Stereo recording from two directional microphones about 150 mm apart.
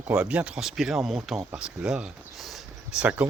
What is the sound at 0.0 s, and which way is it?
Speech, 5° right (ahead or behind).